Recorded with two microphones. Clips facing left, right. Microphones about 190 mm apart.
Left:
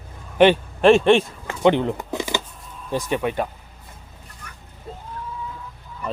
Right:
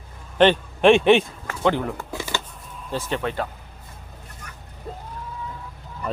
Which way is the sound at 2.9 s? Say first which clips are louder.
Left 3 dB; 15° left (ahead or behind).